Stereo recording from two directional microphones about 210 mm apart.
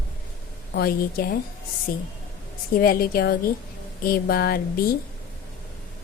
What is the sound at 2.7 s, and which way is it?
Speech, 45° left (ahead or behind).